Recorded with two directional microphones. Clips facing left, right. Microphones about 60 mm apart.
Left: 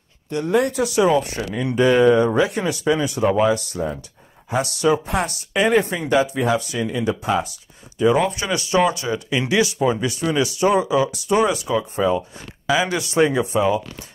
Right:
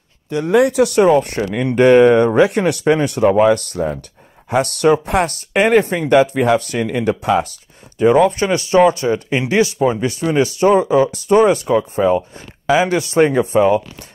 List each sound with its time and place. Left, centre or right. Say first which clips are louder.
0.7 s speech: right 7 dB; right
0.9 s speech: right 2 dB; right
8.3 s speech: right 6 dB; right